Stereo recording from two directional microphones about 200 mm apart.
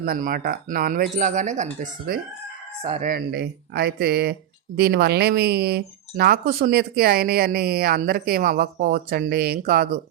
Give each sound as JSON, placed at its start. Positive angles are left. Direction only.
{"t": 0.0, "sound": "speech", "side_deg": -45}
{"t": 2.8, "sound": "speech", "side_deg": -30}
{"t": 3.1, "sound": "speech", "side_deg": -55}